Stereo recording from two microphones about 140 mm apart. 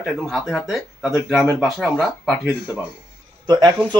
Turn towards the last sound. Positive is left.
turn(degrees=-30)  # may be behind; listen again after turning